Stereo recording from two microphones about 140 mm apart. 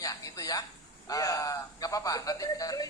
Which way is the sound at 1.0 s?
25° left (ahead or behind).